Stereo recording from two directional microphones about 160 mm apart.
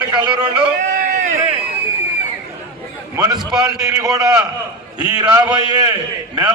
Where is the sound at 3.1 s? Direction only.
15° right (ahead or behind).